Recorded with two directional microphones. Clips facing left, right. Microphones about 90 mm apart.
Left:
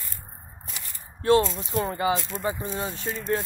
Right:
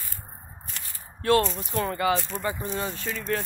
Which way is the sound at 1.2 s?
25° left (ahead or behind).